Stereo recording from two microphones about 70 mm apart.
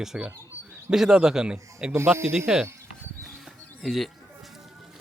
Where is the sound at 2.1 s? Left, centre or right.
Right.